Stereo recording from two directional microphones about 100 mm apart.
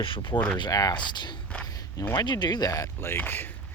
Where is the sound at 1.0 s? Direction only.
50° left (ahead or behind); by 3.1 s 30° left (ahead or behind).